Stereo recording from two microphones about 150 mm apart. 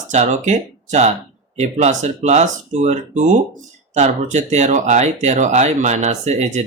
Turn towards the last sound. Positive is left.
turn(degrees=-50)  # may be behind; listen again after turning